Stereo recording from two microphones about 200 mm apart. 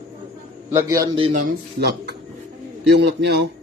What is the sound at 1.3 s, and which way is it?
Speech, 40° right (ahead or behind).